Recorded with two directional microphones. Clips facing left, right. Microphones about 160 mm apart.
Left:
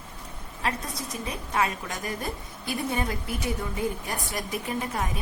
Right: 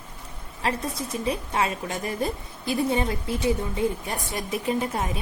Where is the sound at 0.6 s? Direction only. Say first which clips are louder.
Right 4 dB; 30° right (ahead or behind).